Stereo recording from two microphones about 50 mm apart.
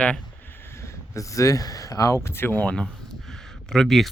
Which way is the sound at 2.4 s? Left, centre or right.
Left.